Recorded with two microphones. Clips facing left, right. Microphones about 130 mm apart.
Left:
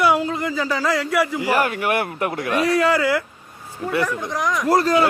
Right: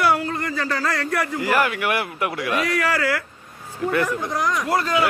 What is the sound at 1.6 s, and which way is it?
Speech, 40° left (ahead or behind).